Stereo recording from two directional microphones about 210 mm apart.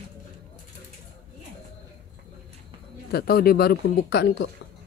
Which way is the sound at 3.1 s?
45° left (ahead or behind).